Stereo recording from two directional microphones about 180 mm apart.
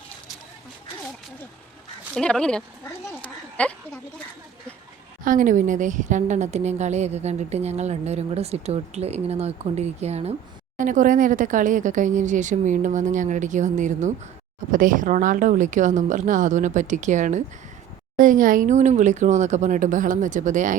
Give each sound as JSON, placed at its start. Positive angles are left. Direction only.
{"t": 2.1, "sound": "speech", "side_deg": 5}
{"t": 3.2, "sound": "a sound", "side_deg": 10}
{"t": 5.2, "sound": "a woman's voice", "side_deg": -45}